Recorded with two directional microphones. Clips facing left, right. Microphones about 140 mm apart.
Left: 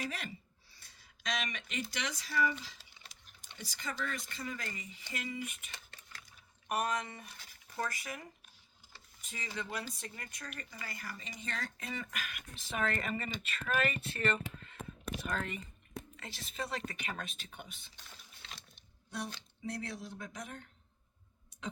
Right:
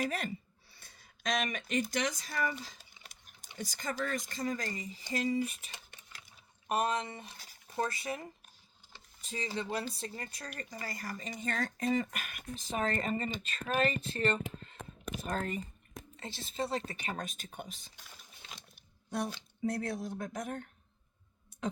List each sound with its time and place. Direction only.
0.0 s speech: 45° right (ahead or behind)
0.7 s a sound: 55° right (ahead or behind)
3.6 s speech: 45° right (ahead or behind)
19.1 s speech: 50° right (ahead or behind)
21.5 s clicking: 50° right (ahead or behind)